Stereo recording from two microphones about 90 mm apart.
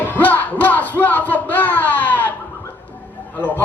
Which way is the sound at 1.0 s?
20° left (ahead or behind).